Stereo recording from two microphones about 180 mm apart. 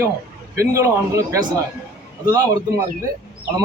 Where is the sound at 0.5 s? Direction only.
15° right (ahead or behind).